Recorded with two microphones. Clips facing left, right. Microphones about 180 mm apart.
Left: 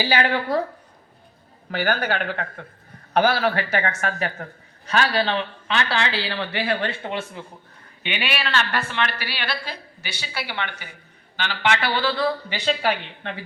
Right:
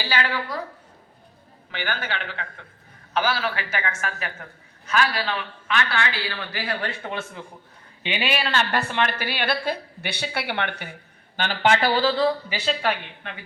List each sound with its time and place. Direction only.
0.3 s speech: 45° left (ahead or behind)
1.7 s a man's voice: 40° left (ahead or behind); by 7.3 s 25° left (ahead or behind)
8.0 s a woman's voice: 30° right (ahead or behind); by 10.9 s 55° right (ahead or behind)
11.3 s speech: 45° right (ahead or behind)
12.8 s a man's voice: 30° left (ahead or behind)